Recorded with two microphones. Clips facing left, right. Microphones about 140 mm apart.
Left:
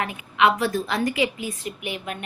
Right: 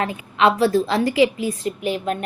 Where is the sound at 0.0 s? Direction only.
30° right (ahead or behind).